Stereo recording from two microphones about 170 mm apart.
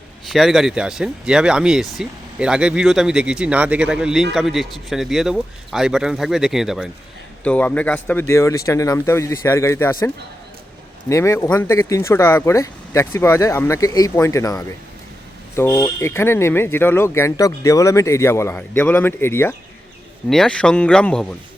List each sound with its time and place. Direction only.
0.3 s speech: centre (ahead or behind)
7.4 s speech: 10° left (ahead or behind)
11.1 s speech: 15° left (ahead or behind)